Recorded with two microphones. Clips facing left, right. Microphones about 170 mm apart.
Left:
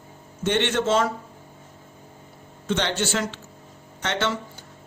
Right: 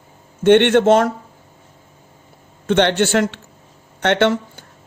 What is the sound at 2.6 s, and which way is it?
A man's voice, 60° right (ahead or behind).